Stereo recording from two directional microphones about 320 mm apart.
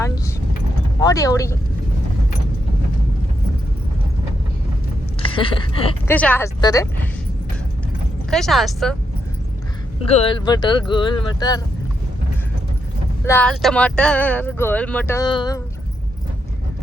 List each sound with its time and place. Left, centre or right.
0.9 s speech: centre
5.2 s speech: centre
6.1 s speech: centre
8.3 s speech: centre
10.1 s speech: centre
13.2 s speech: centre